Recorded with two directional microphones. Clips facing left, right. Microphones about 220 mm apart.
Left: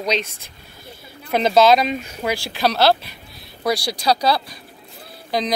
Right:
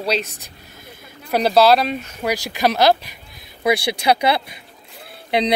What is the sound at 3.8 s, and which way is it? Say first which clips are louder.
Speech: right 3 dB; 60° right (ahead or behind).